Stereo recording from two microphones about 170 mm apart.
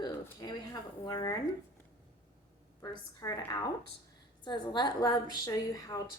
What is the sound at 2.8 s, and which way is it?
A woman's voice, 25° left (ahead or behind).